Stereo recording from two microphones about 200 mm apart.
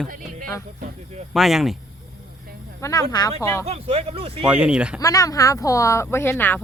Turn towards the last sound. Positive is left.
turn(degrees=10)  # may be behind; listen again after turning